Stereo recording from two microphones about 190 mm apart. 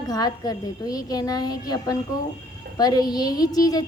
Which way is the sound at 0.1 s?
20° left (ahead or behind).